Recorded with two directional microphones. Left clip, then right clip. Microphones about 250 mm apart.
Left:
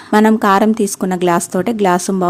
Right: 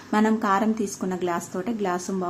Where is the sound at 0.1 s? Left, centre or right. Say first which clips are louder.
Left 11 dB; left.